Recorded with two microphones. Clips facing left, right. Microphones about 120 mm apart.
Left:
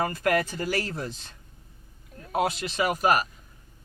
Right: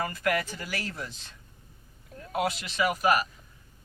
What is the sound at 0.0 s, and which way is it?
A man's voice, 35° left (ahead or behind).